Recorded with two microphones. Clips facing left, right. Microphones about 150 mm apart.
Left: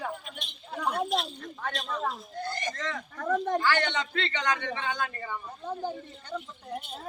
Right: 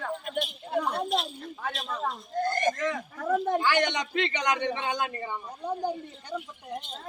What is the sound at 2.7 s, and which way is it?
Speech, 15° right (ahead or behind).